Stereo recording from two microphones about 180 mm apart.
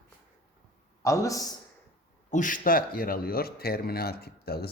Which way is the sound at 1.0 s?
15° left (ahead or behind).